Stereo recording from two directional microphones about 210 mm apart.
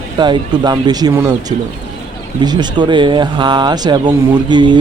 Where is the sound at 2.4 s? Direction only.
20° right (ahead or behind).